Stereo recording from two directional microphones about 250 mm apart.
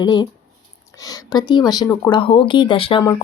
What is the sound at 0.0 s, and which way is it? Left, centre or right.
Speech, centre.